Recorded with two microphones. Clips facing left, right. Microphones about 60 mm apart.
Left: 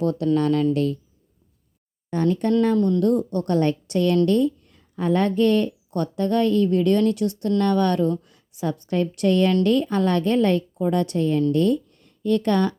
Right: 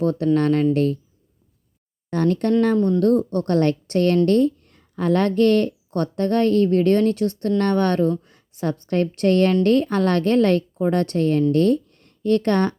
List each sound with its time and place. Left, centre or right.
0.0 s a woman's voice: right
2.0 s a woman's voice: right
2.7 s speech: right
3.0 s a woman's voice: right
10.8 s a woman's voice: right